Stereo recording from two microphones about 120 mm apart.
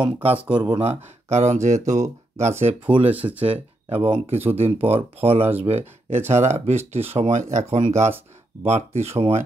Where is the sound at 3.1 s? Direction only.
15° right (ahead or behind).